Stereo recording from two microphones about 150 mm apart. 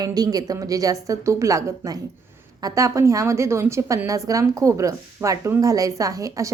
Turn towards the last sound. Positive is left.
turn(degrees=-20)  # may be behind; listen again after turning